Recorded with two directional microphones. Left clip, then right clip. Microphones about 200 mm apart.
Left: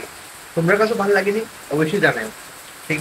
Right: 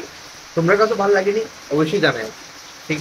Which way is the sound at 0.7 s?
10° right (ahead or behind).